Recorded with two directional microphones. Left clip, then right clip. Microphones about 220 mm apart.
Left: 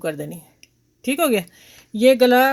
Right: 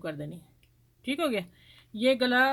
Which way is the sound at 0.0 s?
40° left (ahead or behind).